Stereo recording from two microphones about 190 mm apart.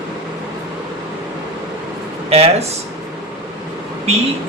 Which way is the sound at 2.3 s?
30° right (ahead or behind).